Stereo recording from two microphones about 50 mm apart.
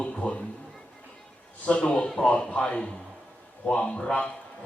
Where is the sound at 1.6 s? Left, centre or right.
Left.